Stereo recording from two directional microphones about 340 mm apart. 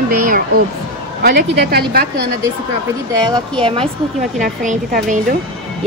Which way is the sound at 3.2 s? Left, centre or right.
Centre.